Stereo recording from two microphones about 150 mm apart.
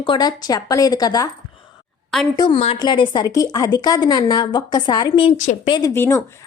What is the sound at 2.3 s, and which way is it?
Speech, 30° left (ahead or behind).